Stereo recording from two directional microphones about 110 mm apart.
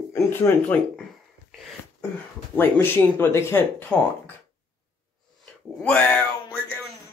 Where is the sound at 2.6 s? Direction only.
20° left (ahead or behind).